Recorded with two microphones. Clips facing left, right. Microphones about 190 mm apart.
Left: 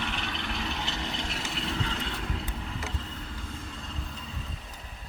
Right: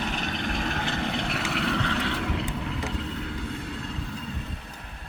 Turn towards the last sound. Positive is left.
turn(degrees=-65)  # may be behind; listen again after turning